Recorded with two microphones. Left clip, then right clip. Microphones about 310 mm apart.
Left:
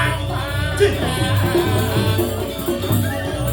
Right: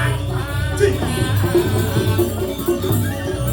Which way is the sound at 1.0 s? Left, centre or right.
Left.